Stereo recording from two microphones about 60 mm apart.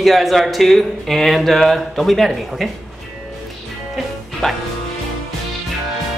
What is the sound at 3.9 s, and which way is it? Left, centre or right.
Music, centre.